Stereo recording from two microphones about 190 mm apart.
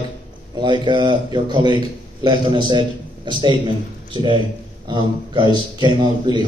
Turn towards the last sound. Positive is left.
turn(degrees=-25)  # may be behind; listen again after turning